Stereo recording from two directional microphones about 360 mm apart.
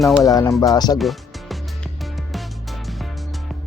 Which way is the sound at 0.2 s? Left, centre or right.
Centre.